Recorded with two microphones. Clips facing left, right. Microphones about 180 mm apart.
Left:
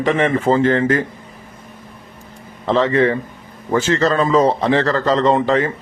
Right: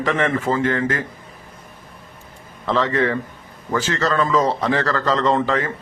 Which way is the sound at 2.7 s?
20° left (ahead or behind).